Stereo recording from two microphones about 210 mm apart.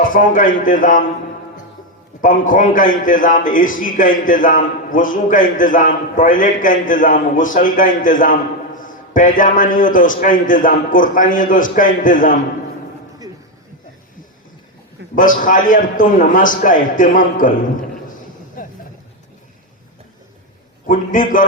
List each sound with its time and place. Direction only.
0.0 s a man's voice: 40° left (ahead or behind)
2.2 s a man's voice: 40° left (ahead or behind)
15.1 s a man's voice: 40° left (ahead or behind)
18.6 s a sound: 40° left (ahead or behind)
20.8 s a man's voice: 40° left (ahead or behind)